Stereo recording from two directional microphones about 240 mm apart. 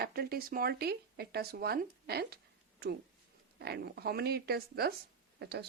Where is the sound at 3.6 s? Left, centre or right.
Right.